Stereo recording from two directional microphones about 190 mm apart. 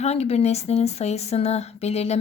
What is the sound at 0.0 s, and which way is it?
Speech, 35° left (ahead or behind).